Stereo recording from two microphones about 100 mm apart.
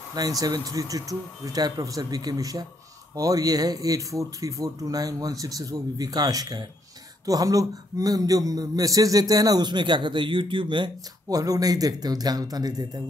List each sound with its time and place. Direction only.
0.1 s a man's voice: 40° right (ahead or behind); by 10.9 s 55° right (ahead or behind)
11.2 s a man's voice: 35° right (ahead or behind)